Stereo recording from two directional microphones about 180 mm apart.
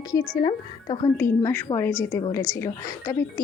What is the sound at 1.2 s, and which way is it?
Speech, 10° left (ahead or behind).